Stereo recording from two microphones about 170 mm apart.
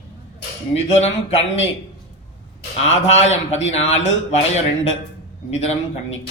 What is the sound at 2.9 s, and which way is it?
Speech, 40° left (ahead or behind).